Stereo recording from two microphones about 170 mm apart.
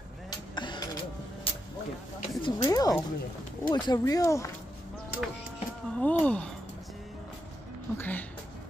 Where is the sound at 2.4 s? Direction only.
20° left (ahead or behind).